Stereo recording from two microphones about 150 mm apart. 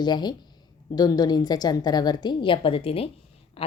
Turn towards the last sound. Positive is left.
turn(degrees=40)  # may be behind; listen again after turning